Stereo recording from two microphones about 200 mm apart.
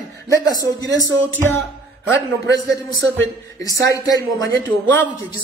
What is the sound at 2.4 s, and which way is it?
Speech, 60° right (ahead or behind).